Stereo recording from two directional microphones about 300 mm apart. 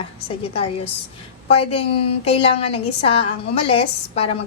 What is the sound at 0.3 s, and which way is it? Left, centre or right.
A woman's voice, centre.